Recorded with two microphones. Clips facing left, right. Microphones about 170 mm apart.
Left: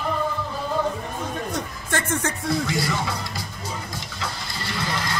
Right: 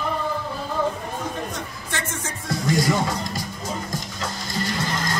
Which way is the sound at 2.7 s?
45° right (ahead or behind).